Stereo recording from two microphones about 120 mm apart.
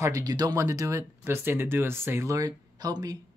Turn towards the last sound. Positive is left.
turn(degrees=-35)  # may be behind; listen again after turning